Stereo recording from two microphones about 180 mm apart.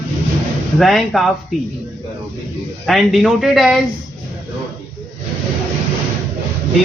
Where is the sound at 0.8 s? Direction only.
Centre (ahead or behind).